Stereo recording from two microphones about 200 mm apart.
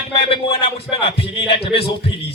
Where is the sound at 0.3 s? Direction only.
30° left (ahead or behind).